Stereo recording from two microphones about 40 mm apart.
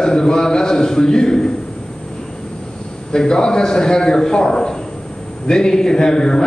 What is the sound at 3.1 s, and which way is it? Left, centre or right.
A man's voice, centre.